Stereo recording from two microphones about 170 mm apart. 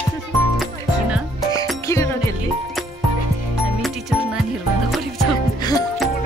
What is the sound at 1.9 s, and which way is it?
Music, 15° left (ahead or behind).